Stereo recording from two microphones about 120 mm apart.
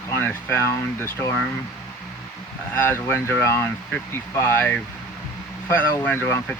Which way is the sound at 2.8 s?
20° left (ahead or behind).